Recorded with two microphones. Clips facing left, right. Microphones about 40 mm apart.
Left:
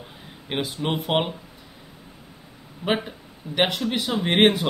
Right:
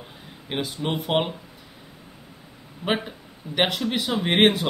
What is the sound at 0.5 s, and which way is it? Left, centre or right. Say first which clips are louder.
Speech: left 1 dB; centre.